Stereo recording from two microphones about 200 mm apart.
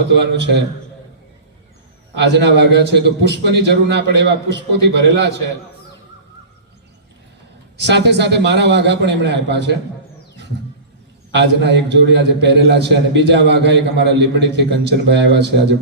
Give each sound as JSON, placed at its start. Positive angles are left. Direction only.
{"t": 0.1, "sound": "a man's voice", "side_deg": -60}
{"t": 2.1, "sound": "a man's voice", "side_deg": -60}
{"t": 7.8, "sound": "a man's voice", "side_deg": -60}
{"t": 11.3, "sound": "a man's voice", "side_deg": -60}